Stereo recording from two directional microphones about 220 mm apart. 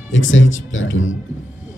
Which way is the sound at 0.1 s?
60° left (ahead or behind).